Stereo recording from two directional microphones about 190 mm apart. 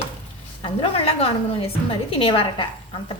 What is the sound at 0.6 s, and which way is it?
A woman's voice, 30° left (ahead or behind).